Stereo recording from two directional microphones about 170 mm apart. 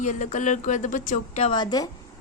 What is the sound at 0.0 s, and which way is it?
Speech, 45° left (ahead or behind).